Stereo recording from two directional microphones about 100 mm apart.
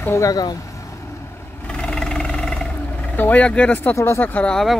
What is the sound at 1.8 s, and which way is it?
Vehicle, 5° left (ahead or behind).